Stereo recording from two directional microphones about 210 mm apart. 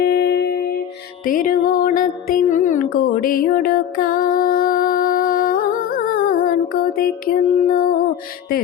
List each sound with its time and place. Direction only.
0.0 s humming: 50° left (ahead or behind)
1.3 s music: 40° left (ahead or behind)